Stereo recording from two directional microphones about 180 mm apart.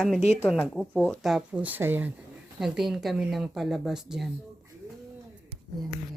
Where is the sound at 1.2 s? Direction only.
5° right (ahead or behind).